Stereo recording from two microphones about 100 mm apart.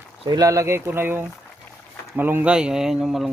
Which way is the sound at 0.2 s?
40° right (ahead or behind).